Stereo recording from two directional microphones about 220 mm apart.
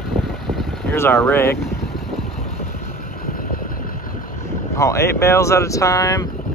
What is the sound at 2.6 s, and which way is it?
Vehicle, 40° left (ahead or behind).